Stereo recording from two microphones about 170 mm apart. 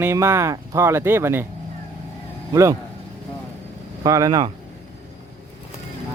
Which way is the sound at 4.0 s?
20° right (ahead or behind).